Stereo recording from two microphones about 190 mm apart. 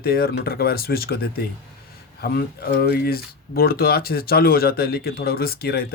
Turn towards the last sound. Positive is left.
turn(degrees=55)  # may be behind; listen again after turning